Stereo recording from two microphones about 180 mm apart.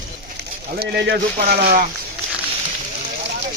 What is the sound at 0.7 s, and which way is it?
Speech, 60° right (ahead or behind).